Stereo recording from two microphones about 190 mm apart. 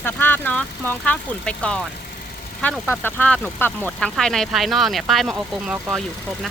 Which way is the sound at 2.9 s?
10° left (ahead or behind).